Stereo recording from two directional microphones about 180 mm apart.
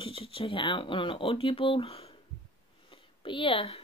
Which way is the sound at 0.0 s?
30° left (ahead or behind).